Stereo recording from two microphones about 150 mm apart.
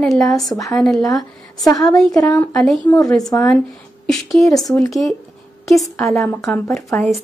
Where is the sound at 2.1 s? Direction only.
25° left (ahead or behind).